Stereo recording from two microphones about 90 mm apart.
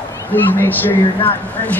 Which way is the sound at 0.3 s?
20° left (ahead or behind).